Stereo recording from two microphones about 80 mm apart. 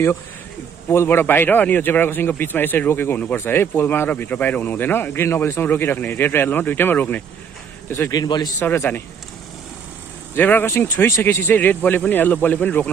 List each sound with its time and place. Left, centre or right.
0.8 s a man's voice: left
8.1 s a man's voice: left
8.5 s a man's voice: left
10.3 s a man's voice: left